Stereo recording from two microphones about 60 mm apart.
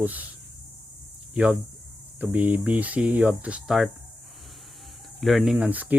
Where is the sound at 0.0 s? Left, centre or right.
Right.